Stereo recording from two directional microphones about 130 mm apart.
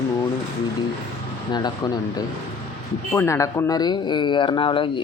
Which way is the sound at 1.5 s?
30° left (ahead or behind).